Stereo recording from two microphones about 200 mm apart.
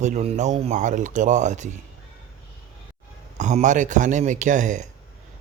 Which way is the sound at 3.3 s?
35° right (ahead or behind).